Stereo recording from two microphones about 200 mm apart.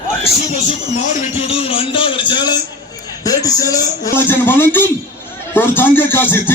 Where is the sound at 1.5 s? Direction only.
30° left (ahead or behind).